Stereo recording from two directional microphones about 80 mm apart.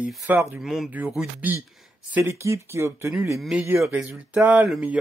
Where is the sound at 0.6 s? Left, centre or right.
Centre.